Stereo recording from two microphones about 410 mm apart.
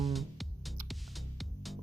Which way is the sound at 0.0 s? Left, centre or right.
Centre.